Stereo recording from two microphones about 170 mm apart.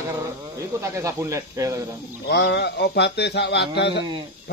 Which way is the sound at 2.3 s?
75° left (ahead or behind).